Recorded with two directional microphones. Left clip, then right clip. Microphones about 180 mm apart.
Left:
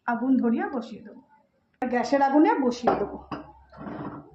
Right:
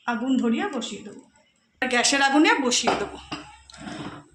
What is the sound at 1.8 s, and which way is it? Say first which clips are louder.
Speech: right 2 dB; 35° left (ahead or behind).